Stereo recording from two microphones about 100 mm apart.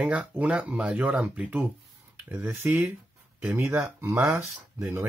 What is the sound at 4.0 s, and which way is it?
Speech, 25° right (ahead or behind).